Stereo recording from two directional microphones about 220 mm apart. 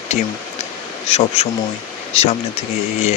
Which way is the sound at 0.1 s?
30° left (ahead or behind).